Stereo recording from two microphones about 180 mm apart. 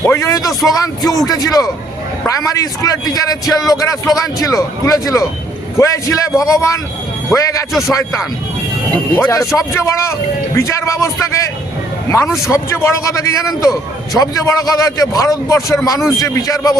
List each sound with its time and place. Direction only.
0.0 s a man's voice: 15° left (ahead or behind)